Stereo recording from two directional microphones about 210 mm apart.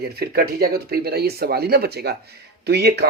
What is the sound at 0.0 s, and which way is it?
Speech, 50° right (ahead or behind).